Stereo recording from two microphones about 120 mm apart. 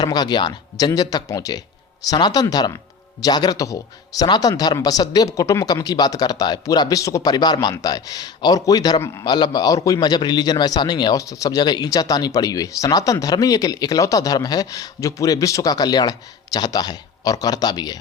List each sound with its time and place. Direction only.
0.0 s a man's voice: 35° left (ahead or behind)